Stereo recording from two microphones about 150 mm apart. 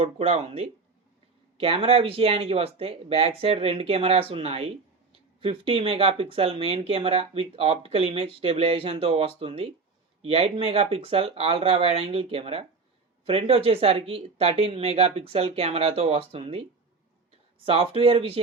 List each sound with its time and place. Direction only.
0.0 s speech: 45° right (ahead or behind)
17.7 s speech: 40° right (ahead or behind)